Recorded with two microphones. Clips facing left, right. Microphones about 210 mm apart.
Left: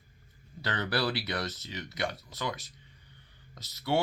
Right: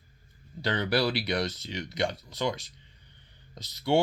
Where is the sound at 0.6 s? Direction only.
15° right (ahead or behind).